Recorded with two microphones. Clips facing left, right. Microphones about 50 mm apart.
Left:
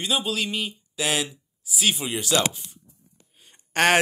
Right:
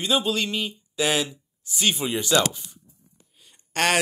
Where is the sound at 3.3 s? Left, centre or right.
Left.